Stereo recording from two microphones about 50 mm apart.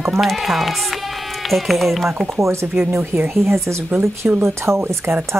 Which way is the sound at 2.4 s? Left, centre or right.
Right.